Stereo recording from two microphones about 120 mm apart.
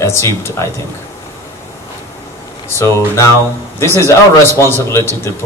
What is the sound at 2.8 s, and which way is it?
A man's voice, 25° left (ahead or behind).